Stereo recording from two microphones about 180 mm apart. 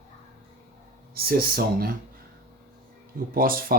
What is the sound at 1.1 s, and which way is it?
Speech, 60° right (ahead or behind).